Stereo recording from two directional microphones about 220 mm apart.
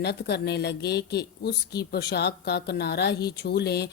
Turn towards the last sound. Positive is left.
turn(degrees=50)  # may be behind; listen again after turning